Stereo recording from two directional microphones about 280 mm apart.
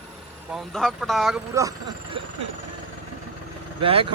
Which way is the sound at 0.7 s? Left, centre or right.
Centre.